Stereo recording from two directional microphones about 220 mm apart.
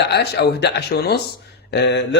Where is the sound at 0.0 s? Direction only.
50° left (ahead or behind).